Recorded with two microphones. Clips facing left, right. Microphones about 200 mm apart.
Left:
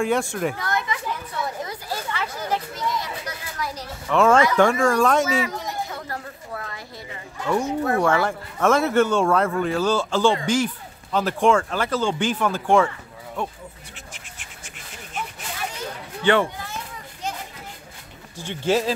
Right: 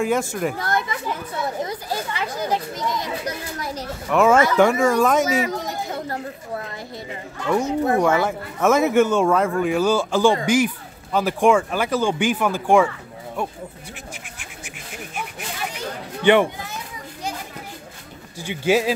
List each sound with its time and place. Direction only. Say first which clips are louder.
0.0 s speech: right 1 dB; 5° right (ahead or behind)
0.6 s speech: right 2 dB; 30° right (ahead or behind)
1.4 s speech: right 5 dB; 20° right (ahead or behind)
3.7 s speech: right 2 dB; 5° right (ahead or behind)
5.2 s a child's voice: right 2 dB; 40° right (ahead or behind)
5.9 s a sound: right 5 dB; 25° right (ahead or behind)
7.6 s speech: right 4 dB; 20° right (ahead or behind)
8.3 s speech: right 1 dB; 5° right (ahead or behind)
16.3 s speech: right 4 dB; 15° right (ahead or behind)
18.4 s speech: right 2 dB; 10° right (ahead or behind)